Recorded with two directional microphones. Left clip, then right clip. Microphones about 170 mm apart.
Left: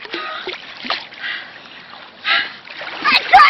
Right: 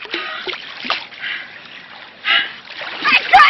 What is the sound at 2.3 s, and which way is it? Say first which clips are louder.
Splash: right 1 dB; centre (ahead or behind).